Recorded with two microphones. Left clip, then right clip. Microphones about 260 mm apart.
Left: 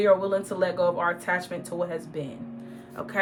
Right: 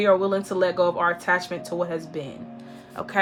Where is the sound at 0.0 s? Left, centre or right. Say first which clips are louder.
Right 1 dB; right.